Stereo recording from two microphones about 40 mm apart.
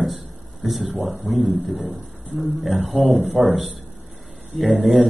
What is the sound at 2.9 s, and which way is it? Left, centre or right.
Speech, centre.